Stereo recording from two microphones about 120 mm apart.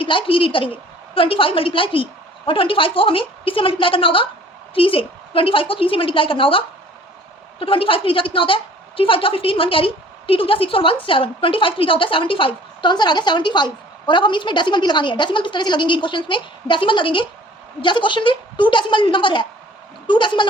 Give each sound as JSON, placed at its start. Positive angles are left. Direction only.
{"t": 0.0, "sound": "a woman's voice", "side_deg": 45}